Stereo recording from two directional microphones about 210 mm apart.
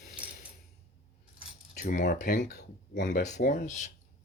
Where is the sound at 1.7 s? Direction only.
40° left (ahead or behind).